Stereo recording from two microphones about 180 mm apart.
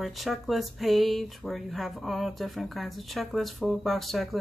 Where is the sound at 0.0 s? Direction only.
Centre (ahead or behind).